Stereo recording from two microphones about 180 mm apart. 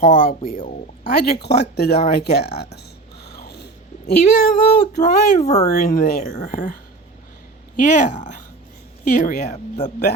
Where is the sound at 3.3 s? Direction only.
65° left (ahead or behind).